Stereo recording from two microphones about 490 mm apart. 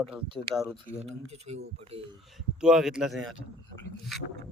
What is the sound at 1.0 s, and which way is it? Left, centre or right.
Speech, centre.